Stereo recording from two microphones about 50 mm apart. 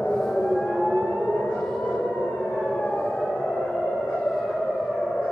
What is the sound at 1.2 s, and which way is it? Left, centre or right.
Siren, left.